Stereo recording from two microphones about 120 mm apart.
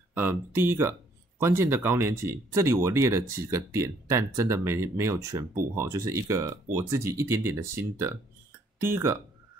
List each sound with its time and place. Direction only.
0.1 s speech: 20° right (ahead or behind)